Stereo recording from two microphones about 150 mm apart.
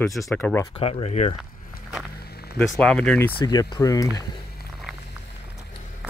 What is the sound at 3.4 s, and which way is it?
Speech, 25° left (ahead or behind).